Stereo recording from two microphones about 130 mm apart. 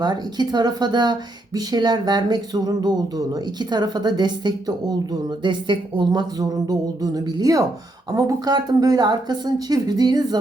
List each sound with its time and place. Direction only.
0.0 s speech: 35° right (ahead or behind)